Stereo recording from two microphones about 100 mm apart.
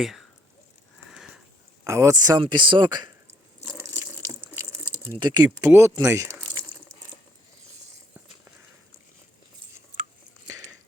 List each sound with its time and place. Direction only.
0.0 s speech: centre (ahead or behind)
1.1 s sniff: 5° right (ahead or behind)
1.8 s speech: 30° right (ahead or behind)
2.4 s speech: 55° right (ahead or behind)
5.2 s speech: 45° right (ahead or behind)
5.6 s speech: 30° right (ahead or behind)